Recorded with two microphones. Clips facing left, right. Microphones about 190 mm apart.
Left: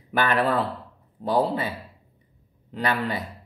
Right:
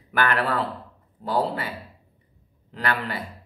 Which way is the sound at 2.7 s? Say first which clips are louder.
Left 2 dB; 20° left (ahead or behind).